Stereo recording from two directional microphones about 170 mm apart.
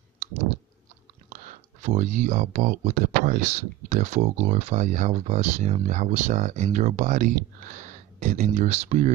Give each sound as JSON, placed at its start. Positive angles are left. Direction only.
{"t": 1.3, "sound": "speech", "side_deg": -45}